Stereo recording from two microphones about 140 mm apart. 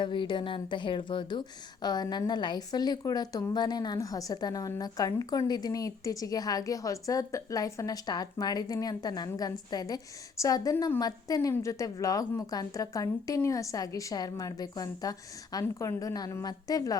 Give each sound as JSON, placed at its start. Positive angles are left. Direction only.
{"t": 0.0, "sound": "a woman's voice", "side_deg": 35}